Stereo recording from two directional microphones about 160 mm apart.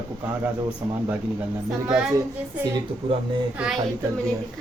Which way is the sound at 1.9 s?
5° right (ahead or behind).